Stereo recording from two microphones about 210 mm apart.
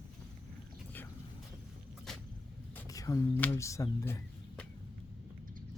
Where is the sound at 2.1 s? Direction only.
5° left (ahead or behind).